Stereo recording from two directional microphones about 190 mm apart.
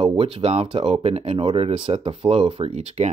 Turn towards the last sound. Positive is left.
turn(degrees=-35)  # may be behind; listen again after turning